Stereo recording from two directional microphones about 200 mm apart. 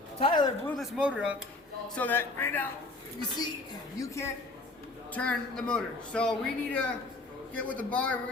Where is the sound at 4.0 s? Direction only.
15° left (ahead or behind).